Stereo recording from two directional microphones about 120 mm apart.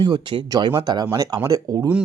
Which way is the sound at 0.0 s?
40° right (ahead or behind).